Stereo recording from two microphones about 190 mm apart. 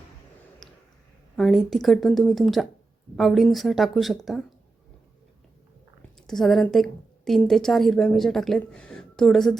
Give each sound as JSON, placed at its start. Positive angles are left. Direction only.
{"t": 0.6, "sound": "a sound", "side_deg": 0}
{"t": 1.4, "sound": "a woman's voice", "side_deg": 0}
{"t": 6.2, "sound": "a woman's voice", "side_deg": 0}